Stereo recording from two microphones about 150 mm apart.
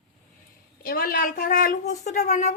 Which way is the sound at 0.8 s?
75° left (ahead or behind).